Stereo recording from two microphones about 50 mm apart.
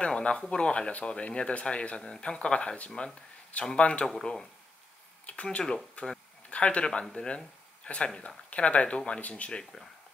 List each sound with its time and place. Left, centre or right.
0.0 s speech: centre
5.2 s speech: left